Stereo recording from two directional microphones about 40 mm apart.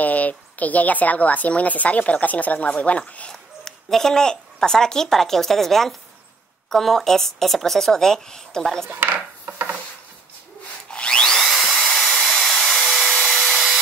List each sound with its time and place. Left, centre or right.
0.0 s a woman's voice: left
3.3 s a woman's voice: centre
10.9 s wood: left
11.3 s a sound: centre